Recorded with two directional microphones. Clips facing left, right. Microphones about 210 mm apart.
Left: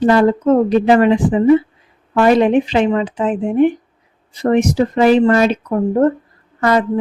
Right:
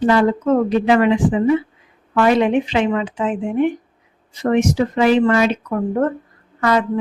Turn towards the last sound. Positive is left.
turn(degrees=40)  # may be behind; listen again after turning